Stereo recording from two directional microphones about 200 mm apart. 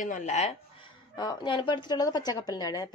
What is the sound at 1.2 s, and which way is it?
A woman's voice, 20° left (ahead or behind).